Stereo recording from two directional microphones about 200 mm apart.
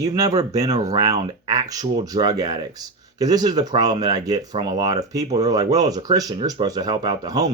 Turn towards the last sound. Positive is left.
turn(degrees=-20)  # may be behind; listen again after turning